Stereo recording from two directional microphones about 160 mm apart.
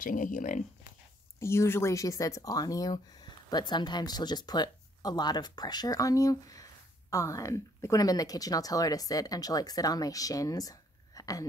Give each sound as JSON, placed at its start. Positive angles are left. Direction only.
{"t": 0.0, "sound": "speech", "side_deg": 55}
{"t": 1.4, "sound": "speech", "side_deg": 15}